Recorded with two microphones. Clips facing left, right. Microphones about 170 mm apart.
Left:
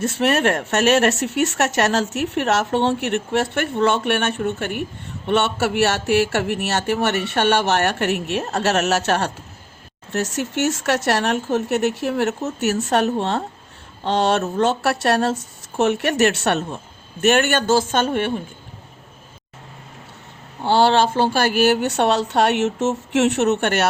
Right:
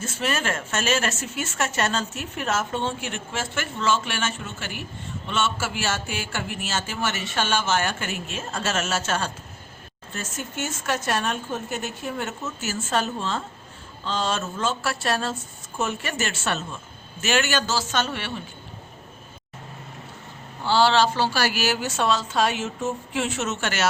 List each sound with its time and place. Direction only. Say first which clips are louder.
0.0 s speech: left 9 dB; 65° left (ahead or behind)
20.7 s speech: left 4 dB; 55° left (ahead or behind)